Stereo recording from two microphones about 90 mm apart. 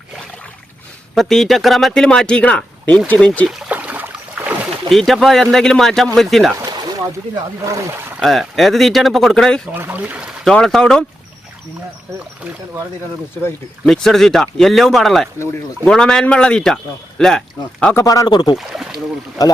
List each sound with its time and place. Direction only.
1.1 s speech: 5° left (ahead or behind)
3.7 s a sound: 15° right (ahead or behind)
4.9 s speech: centre (ahead or behind)
7.3 s speech: 40° right (ahead or behind)
8.2 s speech: centre (ahead or behind)
9.7 s speech: 20° right (ahead or behind)
10.4 s speech: 5° left (ahead or behind)
13.8 s speech: 5° left (ahead or behind)
17.9 s speech: 40° left (ahead or behind)
18.3 s speech: 55° left (ahead or behind)
18.5 s speech: 5° right (ahead or behind)
19.4 s speech: 45° left (ahead or behind)